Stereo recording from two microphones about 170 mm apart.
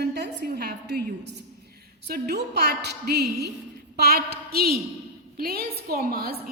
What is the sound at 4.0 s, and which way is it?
A woman's voice, 65° right (ahead or behind).